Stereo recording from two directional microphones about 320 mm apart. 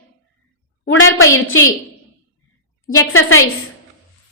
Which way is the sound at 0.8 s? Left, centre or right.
Left.